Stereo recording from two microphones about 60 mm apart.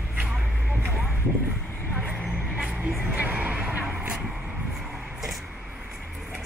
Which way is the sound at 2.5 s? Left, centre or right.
Right.